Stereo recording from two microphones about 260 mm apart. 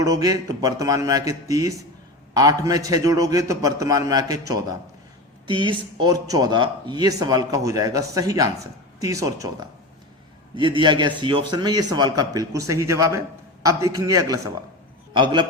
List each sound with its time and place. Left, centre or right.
0.0 s a man's voice: centre